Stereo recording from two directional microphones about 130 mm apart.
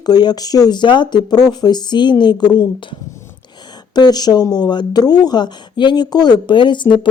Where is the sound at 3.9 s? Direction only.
30° left (ahead or behind).